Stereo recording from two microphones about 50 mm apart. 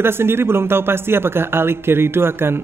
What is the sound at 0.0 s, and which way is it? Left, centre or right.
A man's voice, right.